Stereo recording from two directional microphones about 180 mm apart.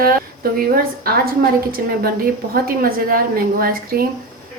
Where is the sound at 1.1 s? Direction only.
55° right (ahead or behind).